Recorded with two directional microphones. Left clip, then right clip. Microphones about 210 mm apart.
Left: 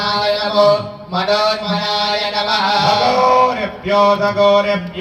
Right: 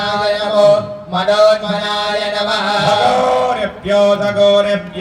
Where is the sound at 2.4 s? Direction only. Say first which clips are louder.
Left 1 dB; 50° right (ahead or behind).